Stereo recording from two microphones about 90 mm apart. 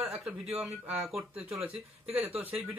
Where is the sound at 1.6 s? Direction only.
15° right (ahead or behind).